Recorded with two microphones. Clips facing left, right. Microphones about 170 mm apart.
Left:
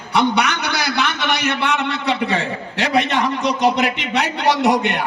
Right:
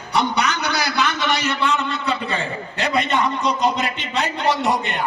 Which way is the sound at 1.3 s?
65° left (ahead or behind).